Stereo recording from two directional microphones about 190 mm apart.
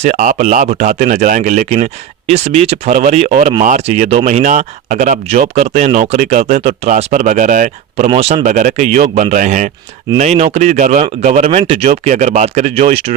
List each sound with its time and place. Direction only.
0.0 s speech: 40° right (ahead or behind)